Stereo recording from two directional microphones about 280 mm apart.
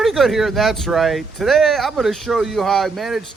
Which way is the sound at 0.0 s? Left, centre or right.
Centre.